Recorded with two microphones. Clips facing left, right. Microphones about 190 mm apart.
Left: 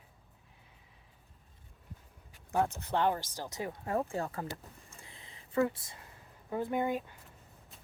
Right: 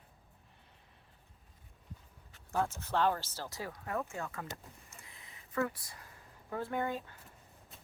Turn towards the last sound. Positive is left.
turn(degrees=15)  # may be behind; listen again after turning